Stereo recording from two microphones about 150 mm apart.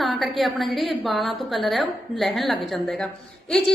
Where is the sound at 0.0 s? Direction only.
Centre (ahead or behind).